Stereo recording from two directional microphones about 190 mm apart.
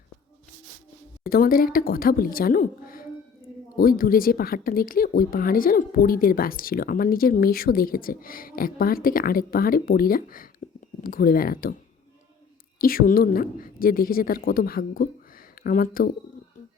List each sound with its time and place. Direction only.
1.2 s a woman's voice: 50° left (ahead or behind)
12.8 s speech: 50° left (ahead or behind)